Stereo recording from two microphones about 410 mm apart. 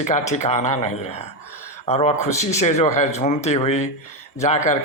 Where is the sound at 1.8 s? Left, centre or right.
Centre.